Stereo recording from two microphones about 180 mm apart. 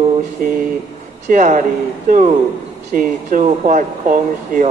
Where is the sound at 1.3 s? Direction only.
40° right (ahead or behind).